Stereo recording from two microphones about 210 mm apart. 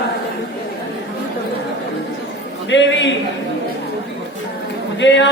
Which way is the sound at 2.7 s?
60° left (ahead or behind).